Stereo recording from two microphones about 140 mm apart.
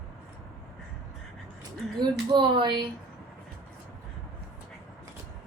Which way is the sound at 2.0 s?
35° right (ahead or behind).